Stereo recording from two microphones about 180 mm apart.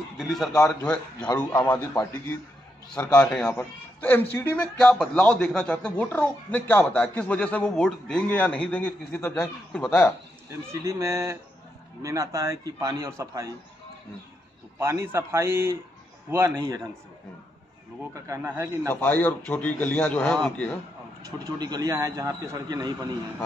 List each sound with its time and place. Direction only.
0.2 s a man's voice: centre (ahead or behind)
10.7 s a man's voice: 15° right (ahead or behind)
14.8 s a man's voice: 15° right (ahead or behind)
18.1 s a man's voice: 15° right (ahead or behind)
18.9 s a man's voice: 10° left (ahead or behind)
21.5 s a man's voice: 20° right (ahead or behind)